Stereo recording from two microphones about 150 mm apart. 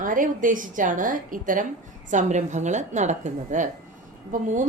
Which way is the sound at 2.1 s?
50° right (ahead or behind).